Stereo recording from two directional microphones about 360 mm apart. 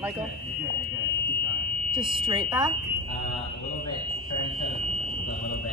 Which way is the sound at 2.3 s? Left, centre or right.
Centre.